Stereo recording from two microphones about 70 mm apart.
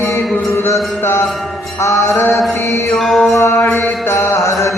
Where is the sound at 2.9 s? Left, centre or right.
Centre.